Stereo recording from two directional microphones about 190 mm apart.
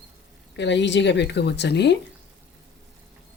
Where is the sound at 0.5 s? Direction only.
70° left (ahead or behind).